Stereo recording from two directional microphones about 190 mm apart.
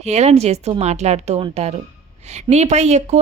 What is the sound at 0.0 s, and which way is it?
Speech, 35° right (ahead or behind).